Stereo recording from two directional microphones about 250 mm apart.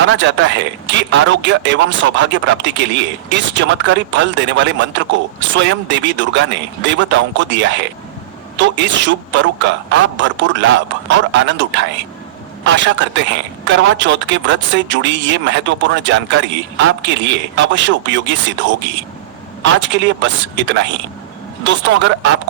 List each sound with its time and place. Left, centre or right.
0.1 s a man's voice: right
19.8 s a man's voice: right